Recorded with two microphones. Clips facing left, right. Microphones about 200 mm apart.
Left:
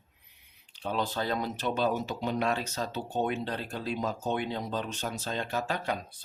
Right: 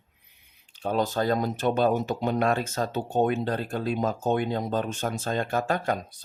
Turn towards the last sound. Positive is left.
turn(degrees=-45)  # may be behind; listen again after turning